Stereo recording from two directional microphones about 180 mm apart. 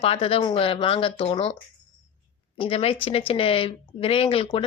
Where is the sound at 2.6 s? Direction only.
30° left (ahead or behind).